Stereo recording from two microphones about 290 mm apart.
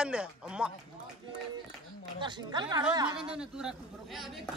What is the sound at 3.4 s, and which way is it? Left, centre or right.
A man's voice, centre.